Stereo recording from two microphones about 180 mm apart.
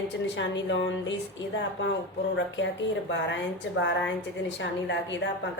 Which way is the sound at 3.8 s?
90° left.